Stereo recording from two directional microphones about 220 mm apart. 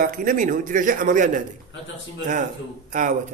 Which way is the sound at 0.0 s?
40° right (ahead or behind).